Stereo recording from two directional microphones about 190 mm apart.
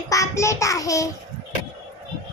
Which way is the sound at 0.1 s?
15° left (ahead or behind).